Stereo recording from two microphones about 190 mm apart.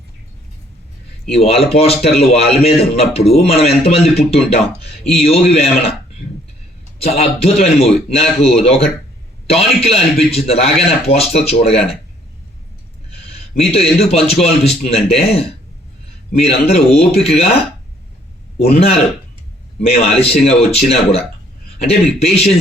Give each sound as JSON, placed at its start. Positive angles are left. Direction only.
{"t": 1.3, "sound": "speech", "side_deg": 30}
{"t": 7.0, "sound": "speech", "side_deg": 30}
{"t": 13.3, "sound": "a sound", "side_deg": 30}
{"t": 14.1, "sound": "speech", "side_deg": 30}
{"t": 20.0, "sound": "speech", "side_deg": 30}